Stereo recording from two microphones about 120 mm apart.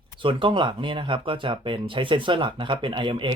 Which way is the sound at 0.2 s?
45° right (ahead or behind).